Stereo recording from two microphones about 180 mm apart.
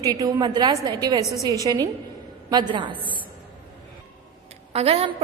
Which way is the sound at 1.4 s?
20° right (ahead or behind).